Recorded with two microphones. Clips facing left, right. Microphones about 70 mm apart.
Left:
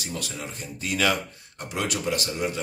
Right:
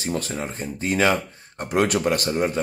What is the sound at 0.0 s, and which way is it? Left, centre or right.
Speech, right.